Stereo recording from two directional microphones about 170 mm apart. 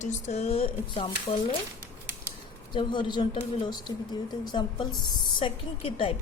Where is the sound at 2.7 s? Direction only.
25° left (ahead or behind).